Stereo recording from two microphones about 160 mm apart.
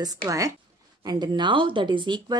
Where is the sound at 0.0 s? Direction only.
25° right (ahead or behind).